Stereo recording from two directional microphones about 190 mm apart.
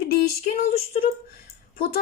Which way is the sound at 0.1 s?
50° left (ahead or behind).